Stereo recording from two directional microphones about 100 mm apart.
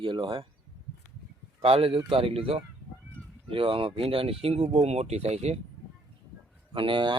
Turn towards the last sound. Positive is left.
turn(degrees=-50)  # may be behind; listen again after turning